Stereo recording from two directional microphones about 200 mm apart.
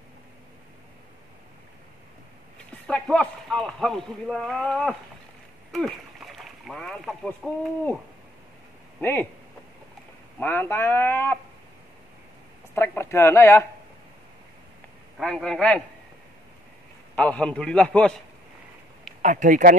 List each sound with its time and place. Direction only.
2.9 s speech: 5° left (ahead or behind)
5.7 s rowboat: centre (ahead or behind)
9.0 s speech: 10° left (ahead or behind)
10.4 s speech: 10° left (ahead or behind)
12.7 s speech: 10° left (ahead or behind)
15.1 s speech: centre (ahead or behind)
17.1 s speech: 5° left (ahead or behind)
19.2 s speech: 40° right (ahead or behind)